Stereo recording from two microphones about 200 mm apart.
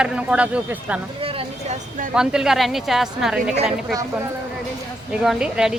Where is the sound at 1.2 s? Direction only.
30° right (ahead or behind).